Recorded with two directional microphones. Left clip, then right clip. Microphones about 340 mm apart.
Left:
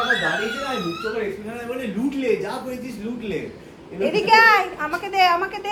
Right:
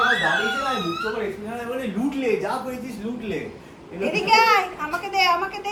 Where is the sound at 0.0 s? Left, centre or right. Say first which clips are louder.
Right 1 dB; centre.